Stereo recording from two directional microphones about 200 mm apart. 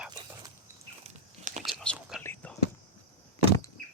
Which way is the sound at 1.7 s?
Centre (ahead or behind).